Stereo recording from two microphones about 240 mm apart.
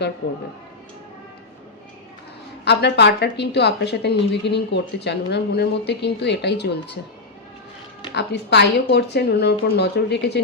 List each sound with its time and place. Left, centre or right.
2.6 s a woman's voice: left
8.1 s a woman's voice: left